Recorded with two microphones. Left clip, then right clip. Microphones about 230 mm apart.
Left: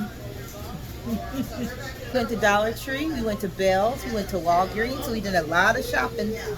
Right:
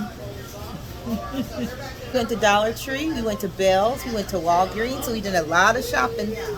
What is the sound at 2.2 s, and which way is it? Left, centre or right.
Speech, centre.